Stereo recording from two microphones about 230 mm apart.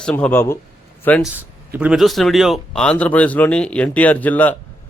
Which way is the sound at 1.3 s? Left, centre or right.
Centre.